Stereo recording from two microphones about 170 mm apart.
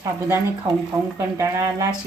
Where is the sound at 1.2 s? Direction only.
15° right (ahead or behind).